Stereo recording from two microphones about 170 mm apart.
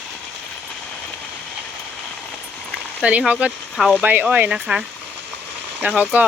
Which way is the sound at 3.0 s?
5° right (ahead or behind).